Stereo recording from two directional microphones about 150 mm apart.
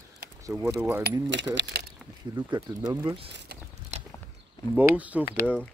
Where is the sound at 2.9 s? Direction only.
25° right (ahead or behind).